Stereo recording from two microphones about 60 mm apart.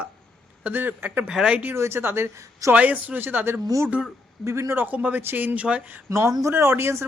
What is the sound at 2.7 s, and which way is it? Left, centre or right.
Speech, right.